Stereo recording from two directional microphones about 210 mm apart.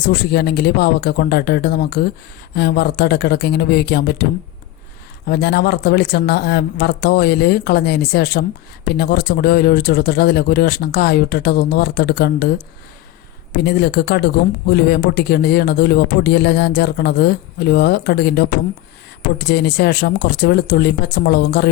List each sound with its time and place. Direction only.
0.1 s speech: 50° left (ahead or behind)
5.3 s speech: 50° left (ahead or behind)
19.5 s speech: 50° left (ahead or behind)